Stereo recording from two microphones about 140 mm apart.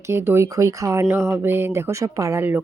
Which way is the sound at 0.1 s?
20° right (ahead or behind).